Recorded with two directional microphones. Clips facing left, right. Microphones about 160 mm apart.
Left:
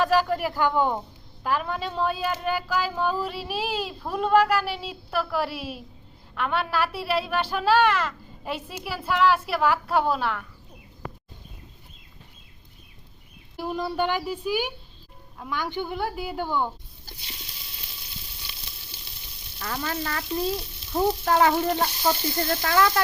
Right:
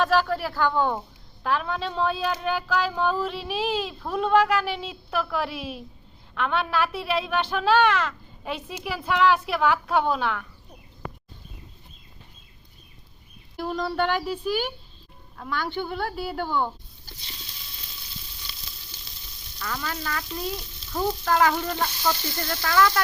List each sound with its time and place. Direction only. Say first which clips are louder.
0.0 s a woman's voice: left 1 dB; 10° left (ahead or behind)
13.6 s speech: right 1 dB; 10° left (ahead or behind)
19.5 s speech: left 2 dB; 30° left (ahead or behind)